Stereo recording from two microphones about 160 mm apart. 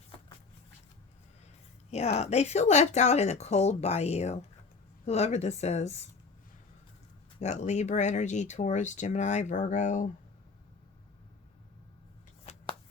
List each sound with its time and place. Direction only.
2.1 s speech: 40° left (ahead or behind)
7.3 s speech: 45° left (ahead or behind)